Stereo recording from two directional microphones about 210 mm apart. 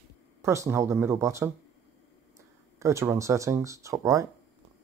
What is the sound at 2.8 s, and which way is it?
Speech, 15° right (ahead or behind).